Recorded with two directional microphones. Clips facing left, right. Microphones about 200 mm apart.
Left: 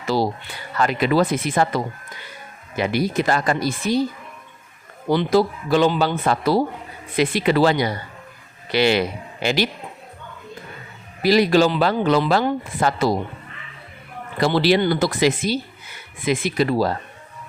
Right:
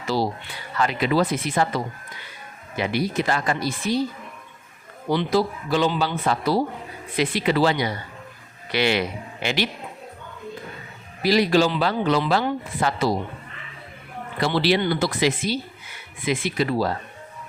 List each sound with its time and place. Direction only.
0.1 s a sound: 50° left (ahead or behind)
0.8 s speech: 50° left (ahead or behind)
5.1 s speech: 50° left (ahead or behind)
11.2 s speech: 50° left (ahead or behind)
14.4 s speech: 45° left (ahead or behind)